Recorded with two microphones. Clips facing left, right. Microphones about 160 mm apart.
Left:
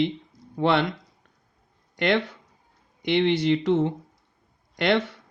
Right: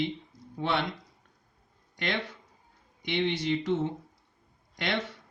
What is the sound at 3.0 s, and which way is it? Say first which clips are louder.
Speech: left 8 dB; 65° left (ahead or behind).